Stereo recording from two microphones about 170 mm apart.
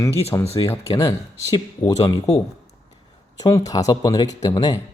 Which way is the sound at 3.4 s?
20° left (ahead or behind).